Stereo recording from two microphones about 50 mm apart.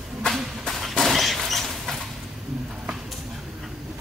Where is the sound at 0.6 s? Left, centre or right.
Centre.